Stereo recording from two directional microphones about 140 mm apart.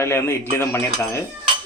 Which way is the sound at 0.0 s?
20° left (ahead or behind).